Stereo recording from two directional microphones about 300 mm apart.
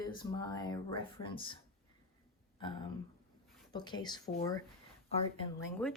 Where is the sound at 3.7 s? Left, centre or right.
Centre.